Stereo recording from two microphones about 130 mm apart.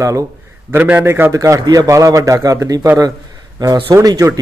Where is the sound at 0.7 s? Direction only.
10° right (ahead or behind).